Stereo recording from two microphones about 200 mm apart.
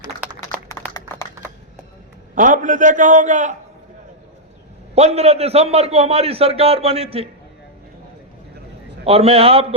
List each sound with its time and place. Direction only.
0.9 s typing: 15° left (ahead or behind)
2.3 s a man's voice: 40° right (ahead or behind)
4.9 s a man's voice: 30° right (ahead or behind)
9.0 s a man's voice: 30° right (ahead or behind)